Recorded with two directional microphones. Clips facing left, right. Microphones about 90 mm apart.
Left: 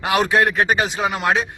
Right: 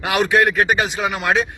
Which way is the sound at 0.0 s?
35° left (ahead or behind).